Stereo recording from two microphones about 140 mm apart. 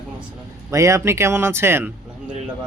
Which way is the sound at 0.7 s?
20° right (ahead or behind).